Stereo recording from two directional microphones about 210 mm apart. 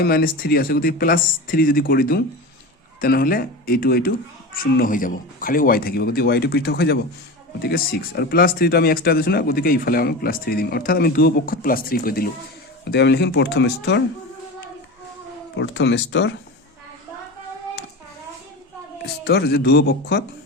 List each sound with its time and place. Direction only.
0.0 s speech: 45° left (ahead or behind)
15.5 s speech: 60° left (ahead or behind)
19.0 s speech: 50° left (ahead or behind)